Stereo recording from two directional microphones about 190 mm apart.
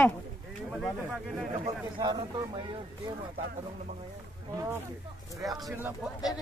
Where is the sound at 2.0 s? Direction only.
20° right (ahead or behind).